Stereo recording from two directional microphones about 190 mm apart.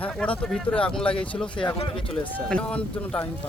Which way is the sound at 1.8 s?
30° left (ahead or behind).